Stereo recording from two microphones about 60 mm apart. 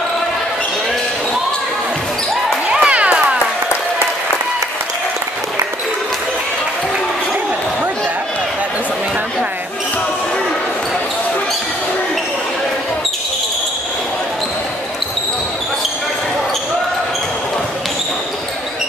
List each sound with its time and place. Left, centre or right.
2.7 s music: centre